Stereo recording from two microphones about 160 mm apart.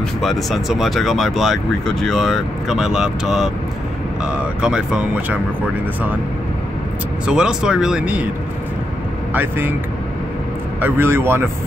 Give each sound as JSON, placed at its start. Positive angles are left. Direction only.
{"t": 0.2, "sound": "speech", "side_deg": 0}
{"t": 7.2, "sound": "speech", "side_deg": -5}
{"t": 9.3, "sound": "speech", "side_deg": -10}
{"t": 10.8, "sound": "speech", "side_deg": -15}